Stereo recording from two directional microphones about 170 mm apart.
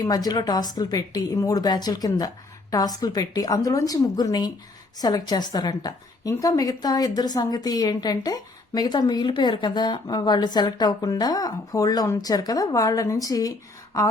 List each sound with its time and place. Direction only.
0.0 s speech: 20° left (ahead or behind)